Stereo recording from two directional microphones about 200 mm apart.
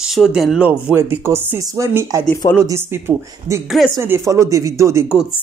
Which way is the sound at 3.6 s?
Centre (ahead or behind).